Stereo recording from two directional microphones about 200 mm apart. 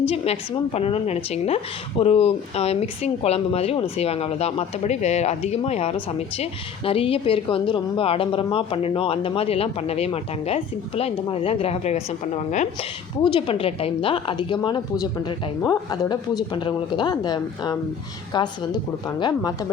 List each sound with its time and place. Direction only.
0.1 s a woman's voice: 30° left (ahead or behind)